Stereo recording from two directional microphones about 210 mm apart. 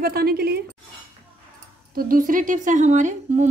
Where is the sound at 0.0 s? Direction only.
45° right (ahead or behind).